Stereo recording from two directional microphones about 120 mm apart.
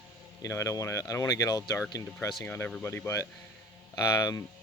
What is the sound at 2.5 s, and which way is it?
Speech, 15° left (ahead or behind).